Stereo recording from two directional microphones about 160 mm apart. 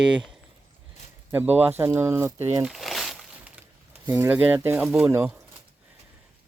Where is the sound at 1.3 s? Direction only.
15° right (ahead or behind).